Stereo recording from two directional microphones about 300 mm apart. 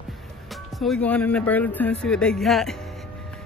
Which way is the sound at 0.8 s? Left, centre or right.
Centre.